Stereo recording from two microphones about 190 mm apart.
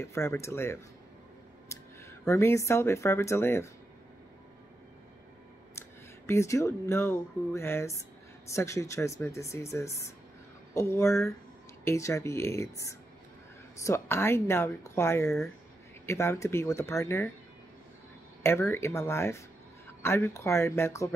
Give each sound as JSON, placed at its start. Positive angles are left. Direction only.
{"t": 0.0, "sound": "speech", "side_deg": 15}
{"t": 5.8, "sound": "speech", "side_deg": 15}
{"t": 18.4, "sound": "speech", "side_deg": 15}